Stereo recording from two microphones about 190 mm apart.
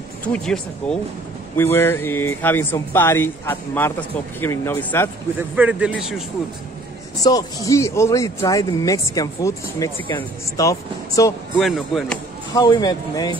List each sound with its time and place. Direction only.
0.3 s speech: 5° left (ahead or behind)
5.6 s speech: 5° right (ahead or behind)
7.2 s speech: 20° left (ahead or behind)
11.6 s speech: centre (ahead or behind)
12.5 s speech: 20° left (ahead or behind)